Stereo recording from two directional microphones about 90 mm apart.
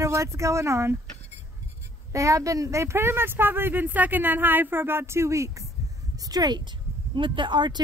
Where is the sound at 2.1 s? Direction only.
35° right (ahead or behind).